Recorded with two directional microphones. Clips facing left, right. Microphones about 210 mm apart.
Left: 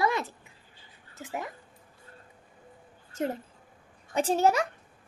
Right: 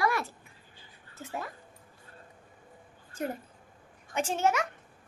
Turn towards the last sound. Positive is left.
turn(degrees=35)  # may be behind; listen again after turning